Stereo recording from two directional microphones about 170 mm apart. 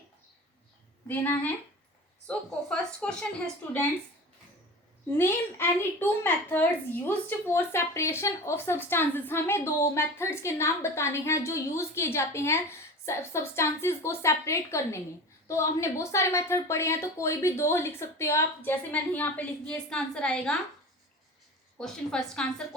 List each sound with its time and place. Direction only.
1.0 s a woman's voice: 10° left (ahead or behind)
5.0 s a woman's voice: 15° left (ahead or behind)
21.8 s a woman's voice: 5° left (ahead or behind)